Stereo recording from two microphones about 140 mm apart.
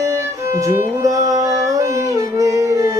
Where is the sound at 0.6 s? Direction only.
25° right (ahead or behind).